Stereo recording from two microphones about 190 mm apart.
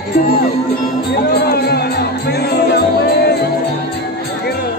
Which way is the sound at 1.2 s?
55° left (ahead or behind).